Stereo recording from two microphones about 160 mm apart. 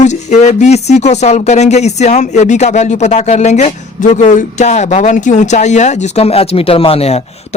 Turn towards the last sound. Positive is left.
turn(degrees=40)  # may be behind; listen again after turning